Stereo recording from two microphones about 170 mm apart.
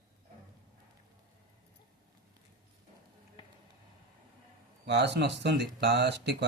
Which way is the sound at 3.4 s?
30° left (ahead or behind).